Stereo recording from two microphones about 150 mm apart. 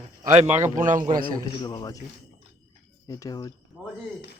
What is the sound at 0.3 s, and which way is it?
Speech, 50° right (ahead or behind).